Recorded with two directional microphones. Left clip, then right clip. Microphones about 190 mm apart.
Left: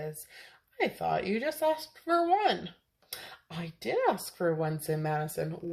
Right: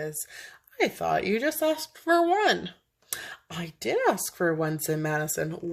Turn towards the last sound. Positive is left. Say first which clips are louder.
# right 4 dB
turn(degrees=-45)  # may be behind; listen again after turning